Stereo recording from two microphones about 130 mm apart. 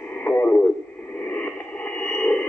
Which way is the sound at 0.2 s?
15° left (ahead or behind).